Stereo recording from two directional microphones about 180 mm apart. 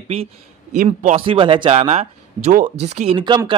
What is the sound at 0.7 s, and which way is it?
Speech, 45° right (ahead or behind).